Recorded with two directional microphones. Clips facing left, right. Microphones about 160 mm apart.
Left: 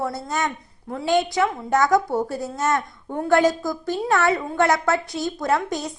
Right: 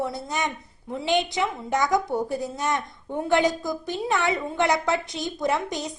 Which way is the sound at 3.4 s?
20° right (ahead or behind).